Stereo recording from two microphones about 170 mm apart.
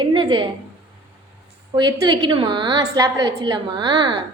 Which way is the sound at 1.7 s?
25° right (ahead or behind).